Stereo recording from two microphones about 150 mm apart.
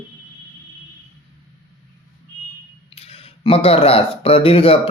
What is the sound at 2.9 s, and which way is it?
Speech, 40° left (ahead or behind).